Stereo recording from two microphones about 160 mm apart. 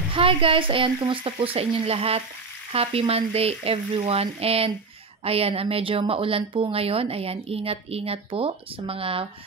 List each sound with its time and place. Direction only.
0.1 s a woman's voice: 35° right (ahead or behind)